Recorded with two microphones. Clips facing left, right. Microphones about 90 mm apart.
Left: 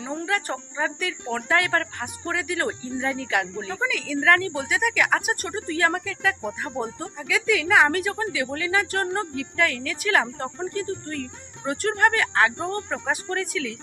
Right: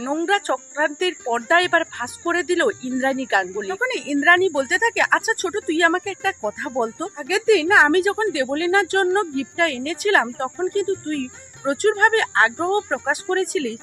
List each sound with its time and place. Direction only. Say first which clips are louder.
0.0 s a woman's voice: right 7 dB; 50° right (ahead or behind)
3.6 s a woman's voice: right 4 dB; 35° right (ahead or behind)
10.7 s a woman's voice: right 7 dB; 50° right (ahead or behind)